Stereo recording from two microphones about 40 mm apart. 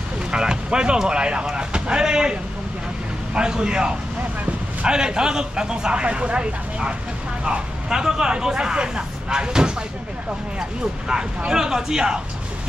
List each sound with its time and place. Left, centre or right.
0.3 s speech: right
3.3 s speech: right
11.1 s speech: centre